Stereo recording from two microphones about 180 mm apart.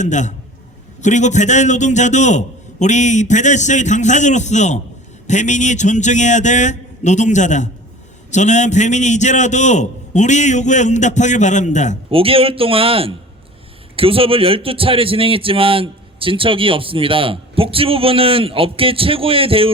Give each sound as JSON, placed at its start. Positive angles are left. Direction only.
{"t": 0.0, "sound": "a man's voice", "side_deg": 40}
{"t": 12.1, "sound": "a man's voice", "side_deg": -30}